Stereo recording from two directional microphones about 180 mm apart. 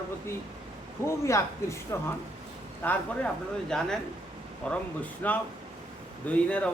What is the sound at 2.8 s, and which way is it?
Speech, 10° left (ahead or behind).